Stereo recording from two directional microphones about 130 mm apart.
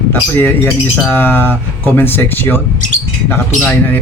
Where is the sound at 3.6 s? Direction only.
15° left (ahead or behind).